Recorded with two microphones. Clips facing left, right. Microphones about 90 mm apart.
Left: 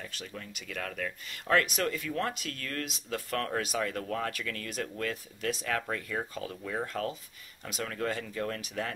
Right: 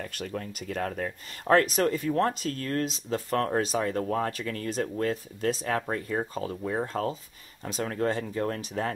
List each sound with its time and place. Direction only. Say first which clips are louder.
0.0 s speech: right 8 dB; 50° right (ahead or behind); by 8.9 s 35° right (ahead or behind)